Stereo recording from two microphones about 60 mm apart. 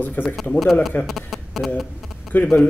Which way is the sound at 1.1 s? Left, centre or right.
Centre.